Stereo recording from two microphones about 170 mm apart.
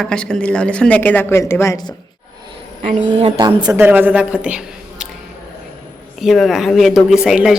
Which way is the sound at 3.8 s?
10° right (ahead or behind).